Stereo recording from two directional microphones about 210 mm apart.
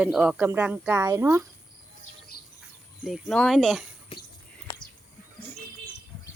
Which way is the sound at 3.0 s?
Centre (ahead or behind).